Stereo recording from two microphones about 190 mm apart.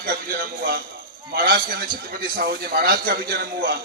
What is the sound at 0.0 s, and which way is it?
A man's voice, 50° right (ahead or behind).